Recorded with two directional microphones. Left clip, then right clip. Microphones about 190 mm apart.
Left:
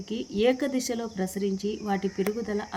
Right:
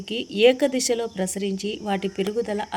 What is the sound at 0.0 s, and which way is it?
A woman's voice, 20° right (ahead or behind).